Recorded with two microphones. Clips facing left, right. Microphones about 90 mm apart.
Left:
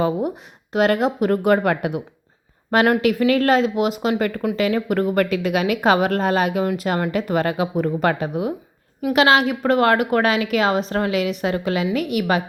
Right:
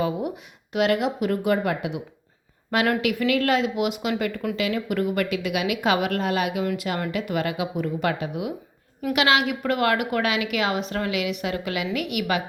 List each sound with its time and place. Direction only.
0.0 s a woman's voice: 35° left (ahead or behind); by 2.0 s 50° left (ahead or behind)
2.6 s a woman's voice: 30° left (ahead or behind)